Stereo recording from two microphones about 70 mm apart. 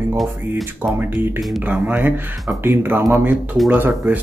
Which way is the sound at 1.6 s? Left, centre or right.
Right.